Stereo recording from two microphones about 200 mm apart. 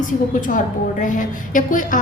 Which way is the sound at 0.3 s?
40° left (ahead or behind).